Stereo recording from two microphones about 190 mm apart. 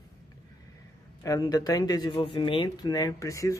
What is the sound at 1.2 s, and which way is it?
Speech, 20° left (ahead or behind).